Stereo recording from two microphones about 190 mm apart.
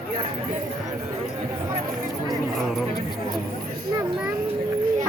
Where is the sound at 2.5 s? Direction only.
Centre (ahead or behind).